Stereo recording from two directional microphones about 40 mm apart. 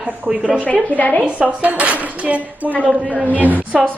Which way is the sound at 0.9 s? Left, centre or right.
Left.